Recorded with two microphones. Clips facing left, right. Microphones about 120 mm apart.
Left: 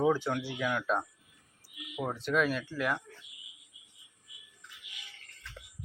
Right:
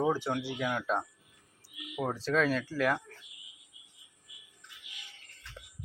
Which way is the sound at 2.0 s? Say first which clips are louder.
Right 1 dB; 35° right (ahead or behind).